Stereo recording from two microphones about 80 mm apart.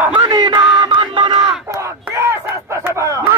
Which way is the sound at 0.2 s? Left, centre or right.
Right.